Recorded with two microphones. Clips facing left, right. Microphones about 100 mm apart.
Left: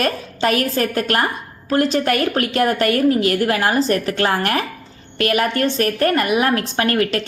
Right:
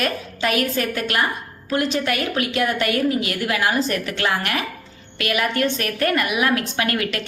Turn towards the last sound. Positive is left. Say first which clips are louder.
# left 5 dB
turn(degrees=35)  # may be behind; listen again after turning